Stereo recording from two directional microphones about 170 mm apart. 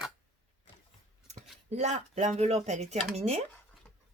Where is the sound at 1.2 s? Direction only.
40° right (ahead or behind).